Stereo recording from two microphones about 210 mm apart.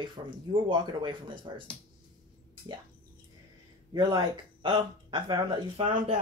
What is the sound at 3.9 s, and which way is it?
Speech, 20° right (ahead or behind).